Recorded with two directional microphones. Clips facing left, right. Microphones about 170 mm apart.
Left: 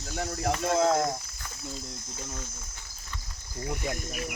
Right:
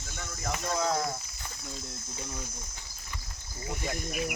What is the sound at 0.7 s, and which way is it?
Speech, 50° left (ahead or behind).